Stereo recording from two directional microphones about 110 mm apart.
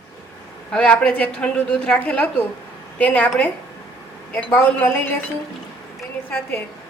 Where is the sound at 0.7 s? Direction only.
10° left (ahead or behind).